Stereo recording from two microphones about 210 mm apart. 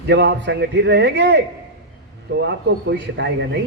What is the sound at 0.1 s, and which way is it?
A man's voice, 55° right (ahead or behind).